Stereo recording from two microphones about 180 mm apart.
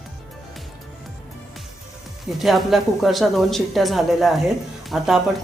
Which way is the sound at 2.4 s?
Centre (ahead or behind).